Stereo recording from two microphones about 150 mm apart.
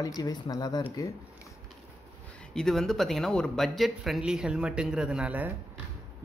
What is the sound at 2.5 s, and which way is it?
Speech, 5° left (ahead or behind).